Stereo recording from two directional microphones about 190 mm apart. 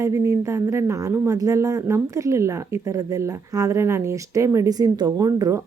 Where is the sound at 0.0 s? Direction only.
15° right (ahead or behind).